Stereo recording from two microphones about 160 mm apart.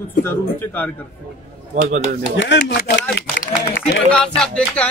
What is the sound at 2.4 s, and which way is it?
Speech, 80° left.